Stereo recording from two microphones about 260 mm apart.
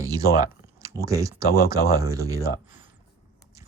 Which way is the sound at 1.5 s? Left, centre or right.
Left.